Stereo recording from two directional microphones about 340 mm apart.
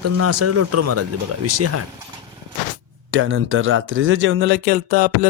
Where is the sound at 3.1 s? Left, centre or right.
Right.